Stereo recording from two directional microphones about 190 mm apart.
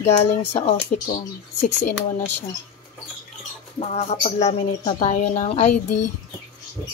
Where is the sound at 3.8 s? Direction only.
35° left (ahead or behind).